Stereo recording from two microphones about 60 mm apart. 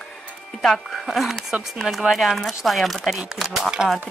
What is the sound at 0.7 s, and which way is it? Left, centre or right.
Speech, centre.